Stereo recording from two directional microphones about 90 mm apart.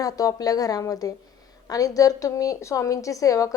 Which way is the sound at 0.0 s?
40° left (ahead or behind).